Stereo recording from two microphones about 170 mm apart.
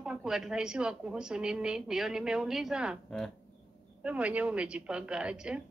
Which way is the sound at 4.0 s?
10° right (ahead or behind).